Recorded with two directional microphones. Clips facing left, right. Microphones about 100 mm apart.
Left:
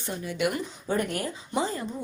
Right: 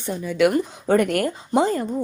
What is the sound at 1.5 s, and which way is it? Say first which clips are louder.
Speech: right 9 dB; 55° right (ahead or behind).